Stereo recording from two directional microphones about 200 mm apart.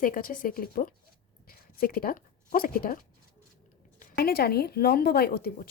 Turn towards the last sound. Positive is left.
turn(degrees=50)  # may be behind; listen again after turning